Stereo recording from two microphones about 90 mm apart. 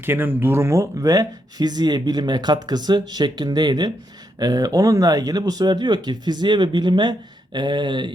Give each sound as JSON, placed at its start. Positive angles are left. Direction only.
{"t": 0.0, "sound": "speech", "side_deg": -25}